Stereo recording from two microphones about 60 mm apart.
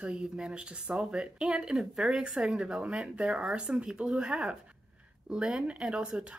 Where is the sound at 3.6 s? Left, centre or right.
Centre.